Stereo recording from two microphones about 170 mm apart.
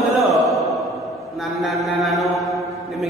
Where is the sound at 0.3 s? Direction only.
Centre (ahead or behind).